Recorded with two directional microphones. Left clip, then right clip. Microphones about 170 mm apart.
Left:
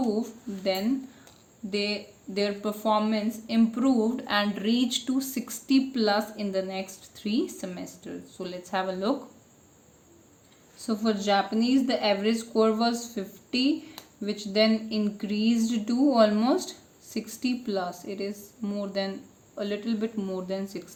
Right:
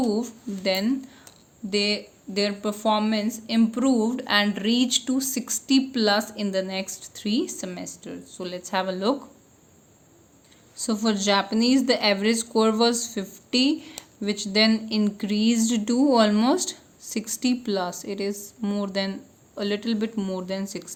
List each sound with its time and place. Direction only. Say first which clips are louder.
0.1 s speech: right 3 dB; 45° right (ahead or behind)
10.8 s speech: right 3 dB; 45° right (ahead or behind)